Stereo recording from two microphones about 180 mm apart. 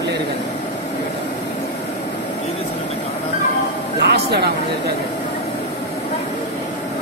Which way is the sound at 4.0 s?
70° right (ahead or behind).